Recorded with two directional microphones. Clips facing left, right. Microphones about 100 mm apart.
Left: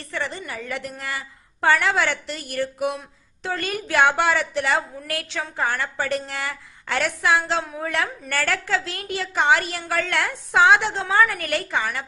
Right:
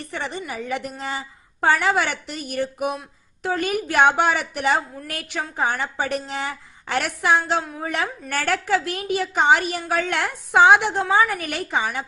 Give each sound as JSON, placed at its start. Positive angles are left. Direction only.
{"t": 0.1, "sound": "a woman's voice", "side_deg": -20}